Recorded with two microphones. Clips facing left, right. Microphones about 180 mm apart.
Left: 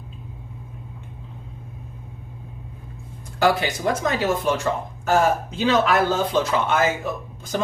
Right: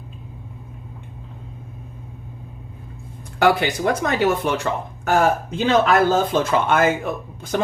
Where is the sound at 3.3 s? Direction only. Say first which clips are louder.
Right 3 dB; 60° right (ahead or behind).